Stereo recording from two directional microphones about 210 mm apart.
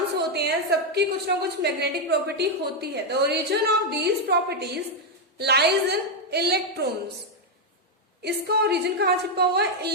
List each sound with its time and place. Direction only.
0.2 s a woman's voice: 50° right (ahead or behind)
8.2 s a woman's voice: 50° right (ahead or behind)